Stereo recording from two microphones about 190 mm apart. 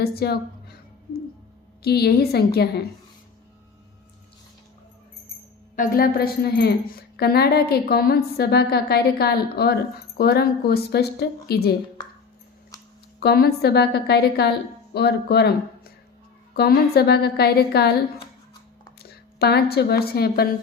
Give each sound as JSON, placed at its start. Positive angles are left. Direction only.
{"t": 0.0, "sound": "a woman's voice", "side_deg": 55}
{"t": 1.8, "sound": "a woman's voice", "side_deg": 55}
{"t": 5.7, "sound": "a woman's voice", "side_deg": 50}
{"t": 13.1, "sound": "a woman's voice", "side_deg": 55}
{"t": 19.4, "sound": "a woman's voice", "side_deg": 55}